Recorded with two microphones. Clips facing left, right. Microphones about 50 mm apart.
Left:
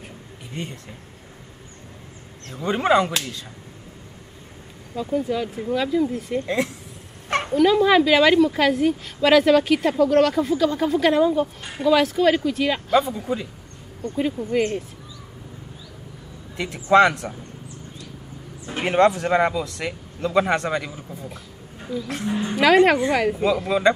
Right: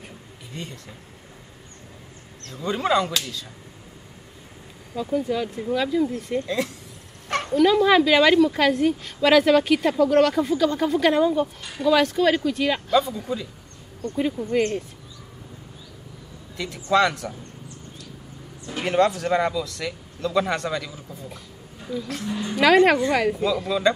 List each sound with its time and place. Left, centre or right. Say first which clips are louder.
2.4 s speech: left 3 dB; left
4.9 s a woman's voice: left 1 dB; centre
6.4 s speech: left 2 dB; left
7.2 s bow-wow: left 3 dB; left
7.5 s a woman's voice: left 1 dB; centre
12.9 s speech: left 2 dB; left
14.1 s a woman's voice: left 1 dB; centre
16.5 s a man's voice: left 5 dB; left
18.7 s speech: left 3 dB; left
22.0 s speech: left 6 dB; left
22.6 s a woman's voice: left 1 dB; centre
23.7 s speech: left 2 dB; left